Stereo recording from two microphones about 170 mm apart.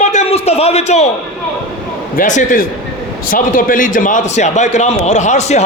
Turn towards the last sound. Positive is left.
turn(degrees=40)  # may be behind; listen again after turning